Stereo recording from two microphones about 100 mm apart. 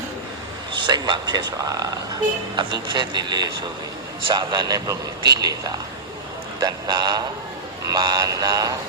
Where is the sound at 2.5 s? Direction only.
50° right (ahead or behind).